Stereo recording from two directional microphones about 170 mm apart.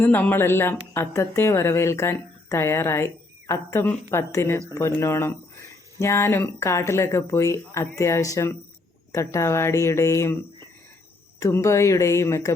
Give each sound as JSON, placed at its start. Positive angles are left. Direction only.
{"t": 0.0, "sound": "a woman's voice", "side_deg": 10}
{"t": 11.3, "sound": "a woman's voice", "side_deg": 15}